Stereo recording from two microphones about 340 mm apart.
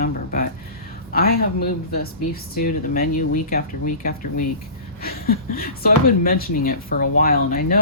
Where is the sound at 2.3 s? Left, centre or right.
Left.